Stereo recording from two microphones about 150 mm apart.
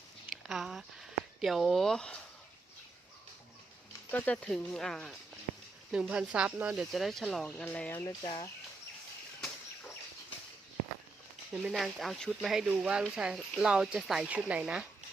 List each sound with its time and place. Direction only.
0.3 s a sound: 5° right (ahead or behind)
1.4 s speech: centre (ahead or behind)
4.1 s speech: 10° left (ahead or behind)
7.5 s speech: 10° left (ahead or behind)
8.0 s speech: 30° left (ahead or behind)
11.5 s speech: centre (ahead or behind)